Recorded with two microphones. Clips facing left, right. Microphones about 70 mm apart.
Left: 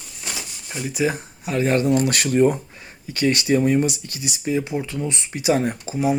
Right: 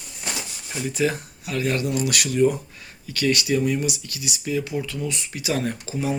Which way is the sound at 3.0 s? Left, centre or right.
Left.